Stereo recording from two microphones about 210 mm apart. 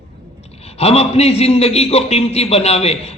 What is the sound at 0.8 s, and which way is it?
A man's voice, 30° left (ahead or behind).